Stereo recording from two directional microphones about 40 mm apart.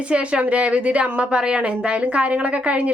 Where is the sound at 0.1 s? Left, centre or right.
Right.